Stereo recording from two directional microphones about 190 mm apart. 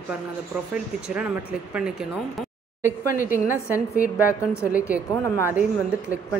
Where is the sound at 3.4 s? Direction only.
10° right (ahead or behind).